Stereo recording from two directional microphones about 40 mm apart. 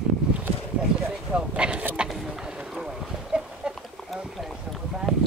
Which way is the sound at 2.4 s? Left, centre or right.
Centre.